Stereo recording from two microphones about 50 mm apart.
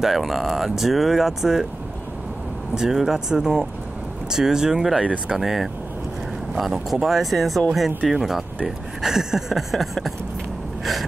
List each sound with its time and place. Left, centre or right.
0.0 s speech: centre
2.7 s speech: centre
5.0 s speech: right
5.4 s speech: centre